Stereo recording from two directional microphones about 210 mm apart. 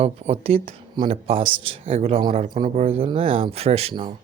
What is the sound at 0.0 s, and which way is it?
Speech, 30° right (ahead or behind).